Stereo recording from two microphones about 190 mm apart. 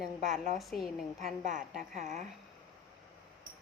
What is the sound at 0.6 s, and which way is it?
Speech, centre (ahead or behind).